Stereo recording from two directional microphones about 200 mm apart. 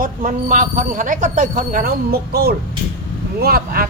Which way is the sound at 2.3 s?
50° right (ahead or behind).